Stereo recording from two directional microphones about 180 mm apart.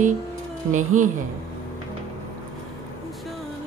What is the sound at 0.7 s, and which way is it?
Speech, 45° right (ahead or behind).